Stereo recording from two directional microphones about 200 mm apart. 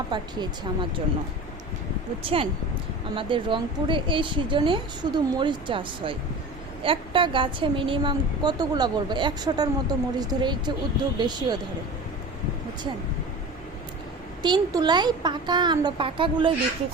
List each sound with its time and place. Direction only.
0.1 s a woman's voice: 25° right (ahead or behind)
2.2 s a woman's voice: 30° right (ahead or behind)
14.4 s a woman's voice: 20° right (ahead or behind)